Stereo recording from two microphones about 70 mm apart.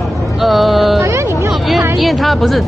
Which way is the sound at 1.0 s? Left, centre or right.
Right.